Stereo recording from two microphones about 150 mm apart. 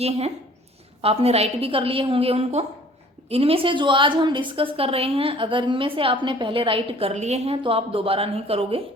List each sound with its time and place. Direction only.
0.0 s a woman's voice: 45° right (ahead or behind)